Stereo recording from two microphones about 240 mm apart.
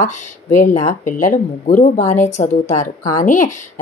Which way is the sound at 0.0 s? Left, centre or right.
Left.